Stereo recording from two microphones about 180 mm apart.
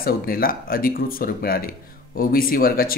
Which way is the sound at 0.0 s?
55° left (ahead or behind).